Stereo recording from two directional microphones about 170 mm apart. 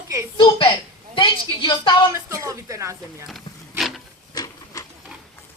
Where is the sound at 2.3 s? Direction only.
15° right (ahead or behind).